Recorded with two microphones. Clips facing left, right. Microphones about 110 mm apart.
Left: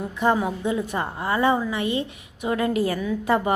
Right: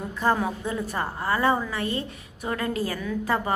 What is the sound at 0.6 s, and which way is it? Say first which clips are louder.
A woman's voice: left 3 dB; 20° left (ahead or behind).